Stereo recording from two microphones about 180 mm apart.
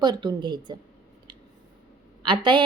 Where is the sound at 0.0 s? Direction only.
25° right (ahead or behind).